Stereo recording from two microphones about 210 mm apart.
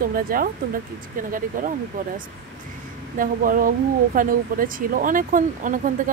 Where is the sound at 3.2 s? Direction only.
40° right (ahead or behind).